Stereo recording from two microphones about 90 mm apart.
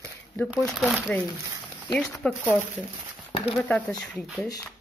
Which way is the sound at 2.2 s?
20° left (ahead or behind).